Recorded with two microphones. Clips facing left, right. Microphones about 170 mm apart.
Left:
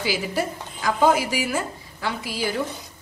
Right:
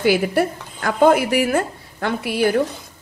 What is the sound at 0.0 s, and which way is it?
A woman's voice, 60° right (ahead or behind).